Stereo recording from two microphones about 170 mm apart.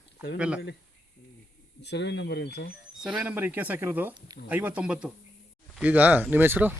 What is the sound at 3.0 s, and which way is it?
Speech, 5° right (ahead or behind).